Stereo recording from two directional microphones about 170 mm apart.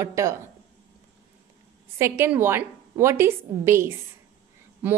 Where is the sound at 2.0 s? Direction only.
15° right (ahead or behind).